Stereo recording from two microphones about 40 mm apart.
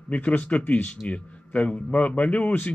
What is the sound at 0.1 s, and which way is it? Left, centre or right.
Speech, left.